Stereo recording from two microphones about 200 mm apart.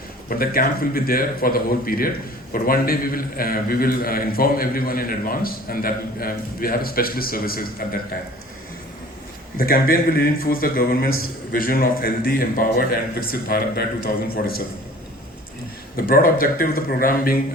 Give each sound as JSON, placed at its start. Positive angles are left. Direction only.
{"t": 0.3, "sound": "a man's voice", "side_deg": 45}
{"t": 9.6, "sound": "a man's voice", "side_deg": 45}
{"t": 16.0, "sound": "a man's voice", "side_deg": 45}